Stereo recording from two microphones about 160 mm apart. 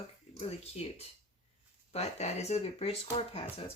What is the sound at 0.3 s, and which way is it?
Speech, 40° left (ahead or behind).